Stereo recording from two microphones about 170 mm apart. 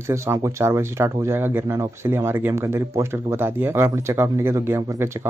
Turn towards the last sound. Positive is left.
turn(degrees=-15)  # may be behind; listen again after turning